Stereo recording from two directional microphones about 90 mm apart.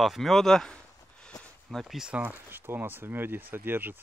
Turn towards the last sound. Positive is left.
turn(degrees=-20)  # may be behind; listen again after turning